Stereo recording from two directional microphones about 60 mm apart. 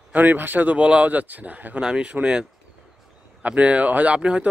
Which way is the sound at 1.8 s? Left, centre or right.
Centre.